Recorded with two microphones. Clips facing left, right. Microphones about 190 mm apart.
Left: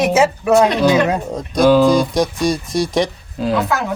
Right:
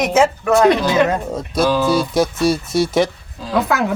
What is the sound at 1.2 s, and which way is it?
Speech, centre (ahead or behind).